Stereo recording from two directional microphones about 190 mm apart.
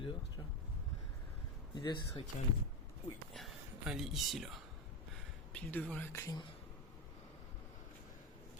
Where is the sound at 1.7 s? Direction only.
25° left (ahead or behind).